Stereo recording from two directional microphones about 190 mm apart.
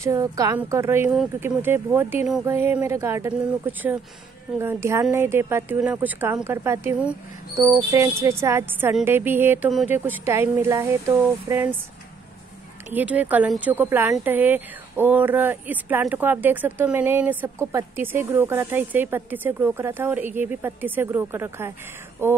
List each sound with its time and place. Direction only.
0.0 s speech: 15° right (ahead or behind)
12.9 s speech: 10° right (ahead or behind)